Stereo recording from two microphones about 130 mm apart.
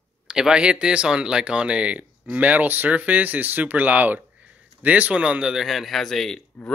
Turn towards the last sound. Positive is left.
turn(degrees=5)  # may be behind; listen again after turning